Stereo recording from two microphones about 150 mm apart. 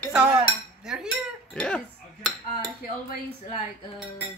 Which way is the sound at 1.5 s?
5° left (ahead or behind).